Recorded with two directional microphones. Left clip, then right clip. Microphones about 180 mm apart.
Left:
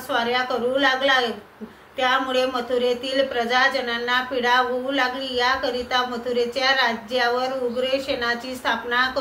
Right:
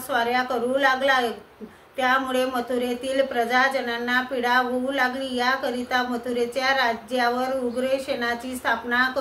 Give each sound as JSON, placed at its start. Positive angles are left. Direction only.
{"t": 0.1, "sound": "a woman's voice", "side_deg": -25}